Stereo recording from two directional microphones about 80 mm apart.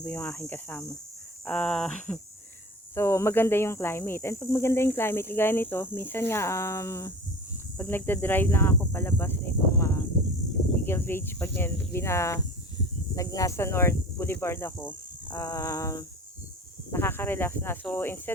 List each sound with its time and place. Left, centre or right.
0.0 s speech: left
1.5 s speech: centre
2.9 s speech: left
7.8 s speech: left
15.4 s speech: left
16.9 s speech: left